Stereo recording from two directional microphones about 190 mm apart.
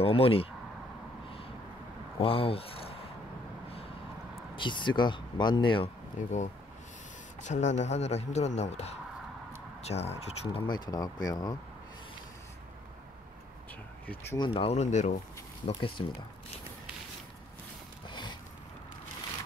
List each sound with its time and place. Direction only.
0.0 s a man's voice: 30° left (ahead or behind)
2.1 s speech: 30° left (ahead or behind)
4.6 s speech: 25° left (ahead or behind)
7.4 s a man's voice: 40° left (ahead or behind)
10.7 s speech: 20° left (ahead or behind)
14.3 s a man's voice: 25° left (ahead or behind)
18.0 s a sound: 25° left (ahead or behind)